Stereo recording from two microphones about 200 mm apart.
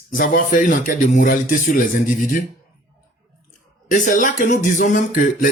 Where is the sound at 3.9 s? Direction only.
40° left (ahead or behind).